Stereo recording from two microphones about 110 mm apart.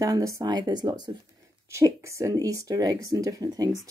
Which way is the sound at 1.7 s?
25° right (ahead or behind).